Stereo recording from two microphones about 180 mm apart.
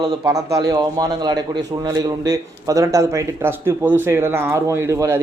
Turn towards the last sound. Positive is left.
turn(degrees=-15)  # may be behind; listen again after turning